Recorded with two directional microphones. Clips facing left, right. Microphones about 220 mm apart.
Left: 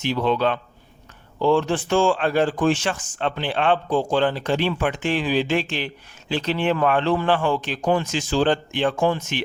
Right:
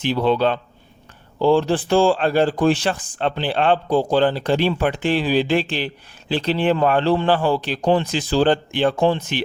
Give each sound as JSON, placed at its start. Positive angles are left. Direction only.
{"t": 0.0, "sound": "speech", "side_deg": -30}